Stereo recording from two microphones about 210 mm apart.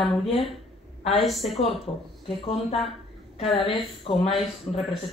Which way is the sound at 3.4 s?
Centre (ahead or behind).